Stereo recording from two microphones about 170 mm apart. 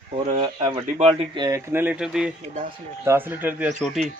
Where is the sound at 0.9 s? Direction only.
40° right (ahead or behind).